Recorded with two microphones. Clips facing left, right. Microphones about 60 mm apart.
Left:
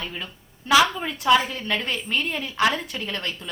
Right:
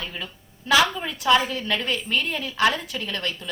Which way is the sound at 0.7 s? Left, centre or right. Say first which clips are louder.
Left 1 dB; centre.